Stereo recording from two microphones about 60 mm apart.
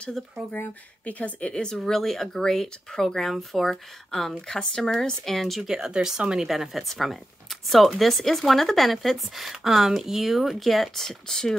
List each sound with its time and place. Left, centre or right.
0.2 s speech: centre
0.6 s speech: left; by 6.5 s centre
6.5 s speech: centre